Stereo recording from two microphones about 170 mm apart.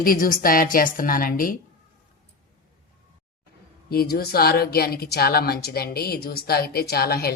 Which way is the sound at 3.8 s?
65° left (ahead or behind).